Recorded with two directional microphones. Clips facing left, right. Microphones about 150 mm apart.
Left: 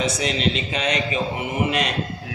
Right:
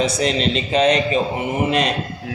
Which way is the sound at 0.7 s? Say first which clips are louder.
Right 8 dB; 35° right (ahead or behind).